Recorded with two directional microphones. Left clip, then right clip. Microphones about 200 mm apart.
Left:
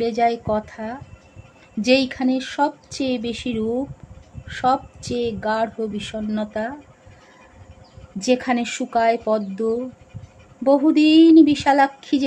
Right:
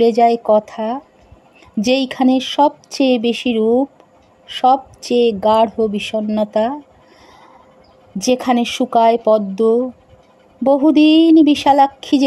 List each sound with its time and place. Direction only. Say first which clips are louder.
0.0 s speech: right 8 dB; 35° right (ahead or behind)
8.2 s speech: right 5 dB; 35° right (ahead or behind)